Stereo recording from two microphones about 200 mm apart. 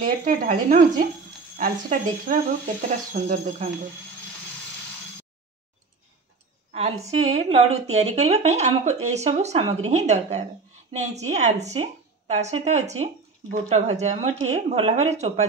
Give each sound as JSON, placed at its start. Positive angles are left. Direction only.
{"t": 0.0, "sound": "a woman's voice", "side_deg": -45}
{"t": 7.1, "sound": "a woman's voice", "side_deg": -30}